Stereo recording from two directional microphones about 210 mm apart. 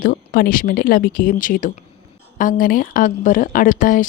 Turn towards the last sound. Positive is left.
turn(degrees=40)  # may be behind; listen again after turning